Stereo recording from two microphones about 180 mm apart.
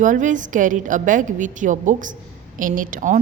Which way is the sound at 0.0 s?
45° right (ahead or behind).